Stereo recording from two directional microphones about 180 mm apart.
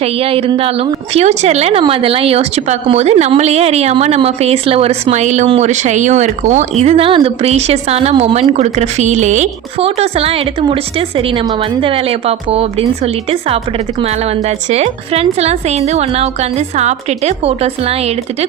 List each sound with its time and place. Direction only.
0.0 s a woman's voice: 30° right (ahead or behind)
11.8 s a woman's voice: 30° right (ahead or behind)
14.7 s a woman's voice: 35° right (ahead or behind)